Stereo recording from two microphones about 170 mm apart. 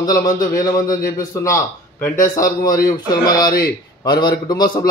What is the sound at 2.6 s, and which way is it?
Speech, 20° left (ahead or behind).